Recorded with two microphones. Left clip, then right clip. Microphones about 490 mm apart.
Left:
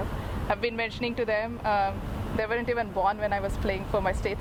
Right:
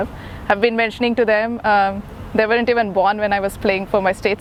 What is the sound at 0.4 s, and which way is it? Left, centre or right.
Speech, right.